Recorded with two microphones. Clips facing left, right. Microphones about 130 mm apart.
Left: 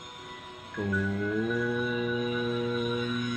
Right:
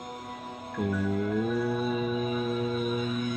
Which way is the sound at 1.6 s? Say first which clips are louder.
Right 1 dB; 35° right (ahead or behind).